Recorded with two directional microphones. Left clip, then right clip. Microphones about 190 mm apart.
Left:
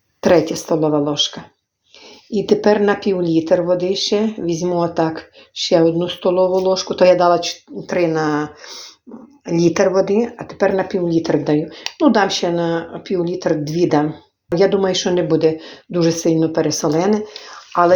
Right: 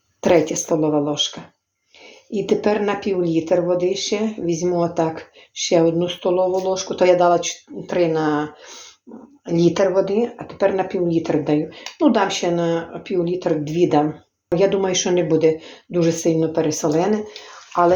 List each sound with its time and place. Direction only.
0.2 s a woman's voice: 25° left (ahead or behind)
2.3 s a woman's voice: 30° left (ahead or behind)
9.5 s speech: 30° left (ahead or behind)
13.5 s speech: 10° left (ahead or behind)
14.7 s a woman's voice: 25° left (ahead or behind)